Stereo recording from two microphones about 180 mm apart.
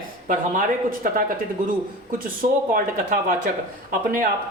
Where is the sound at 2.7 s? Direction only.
50° right (ahead or behind).